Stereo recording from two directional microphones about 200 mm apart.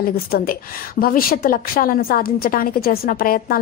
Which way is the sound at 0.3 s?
45° left (ahead or behind).